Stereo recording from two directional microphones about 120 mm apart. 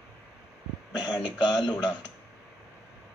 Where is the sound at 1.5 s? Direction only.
5° left (ahead or behind).